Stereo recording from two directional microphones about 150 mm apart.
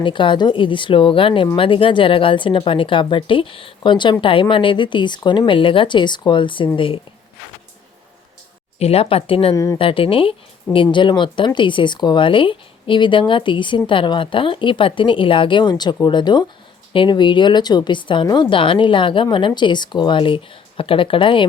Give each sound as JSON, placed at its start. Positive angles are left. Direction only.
{"t": 0.0, "sound": "speech", "side_deg": 35}
{"t": 8.8, "sound": "speech", "side_deg": 40}